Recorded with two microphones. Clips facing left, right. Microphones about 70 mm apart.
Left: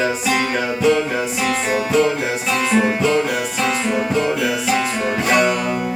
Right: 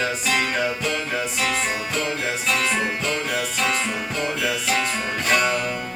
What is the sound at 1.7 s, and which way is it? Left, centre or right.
Music, centre.